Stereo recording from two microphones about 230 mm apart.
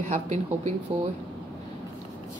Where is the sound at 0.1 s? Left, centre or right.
Right.